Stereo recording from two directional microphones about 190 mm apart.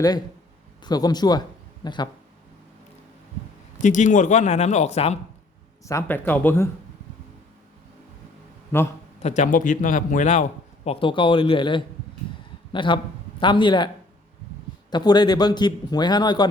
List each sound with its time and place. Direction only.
0.9 s a man's voice: 20° left (ahead or behind)
3.8 s speech: 40° left (ahead or behind)
5.8 s speech: 15° left (ahead or behind)
8.7 s speech: 10° left (ahead or behind)
9.2 s speech: 40° left (ahead or behind)
10.8 s speech: 25° left (ahead or behind)